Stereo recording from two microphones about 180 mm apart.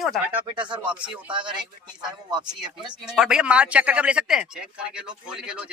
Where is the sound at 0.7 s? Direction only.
25° right (ahead or behind).